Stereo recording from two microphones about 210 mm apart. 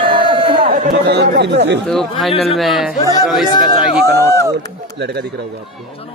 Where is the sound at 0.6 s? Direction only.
45° right (ahead or behind).